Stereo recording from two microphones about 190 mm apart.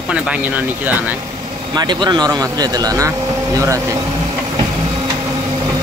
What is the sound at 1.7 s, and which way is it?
Speech, 25° right (ahead or behind).